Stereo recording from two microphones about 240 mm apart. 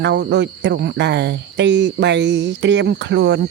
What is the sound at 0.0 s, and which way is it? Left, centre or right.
Cricket, right.